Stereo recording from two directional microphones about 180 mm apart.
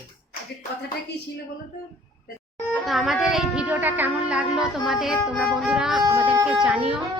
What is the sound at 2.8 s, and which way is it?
Music, centre (ahead or behind).